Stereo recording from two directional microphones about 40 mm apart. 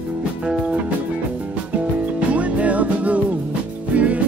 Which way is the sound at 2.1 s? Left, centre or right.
Right.